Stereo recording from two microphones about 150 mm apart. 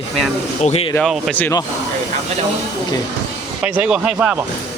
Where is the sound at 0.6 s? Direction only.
45° left (ahead or behind).